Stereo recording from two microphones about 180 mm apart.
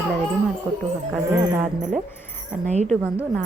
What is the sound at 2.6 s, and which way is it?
Speech, 40° right (ahead or behind).